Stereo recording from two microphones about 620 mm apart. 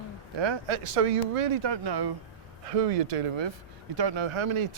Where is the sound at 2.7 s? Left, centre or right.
Right.